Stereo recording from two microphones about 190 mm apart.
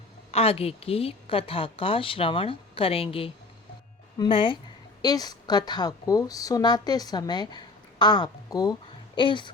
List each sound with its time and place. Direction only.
0.3 s a woman's voice: 30° left (ahead or behind)